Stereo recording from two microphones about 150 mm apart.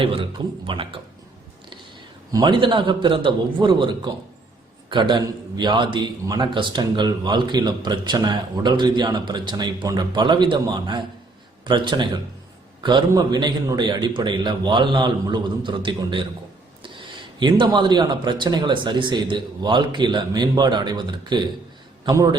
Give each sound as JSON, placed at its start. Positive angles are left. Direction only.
{"t": 0.0, "sound": "a man's voice", "side_deg": -35}
{"t": 2.4, "sound": "a man's voice", "side_deg": -35}
{"t": 17.4, "sound": "a man's voice", "side_deg": -35}